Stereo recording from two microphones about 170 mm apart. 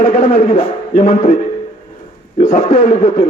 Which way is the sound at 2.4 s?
45° left (ahead or behind).